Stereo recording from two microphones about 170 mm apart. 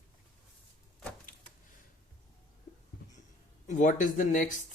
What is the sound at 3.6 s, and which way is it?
Speech, 45° left (ahead or behind).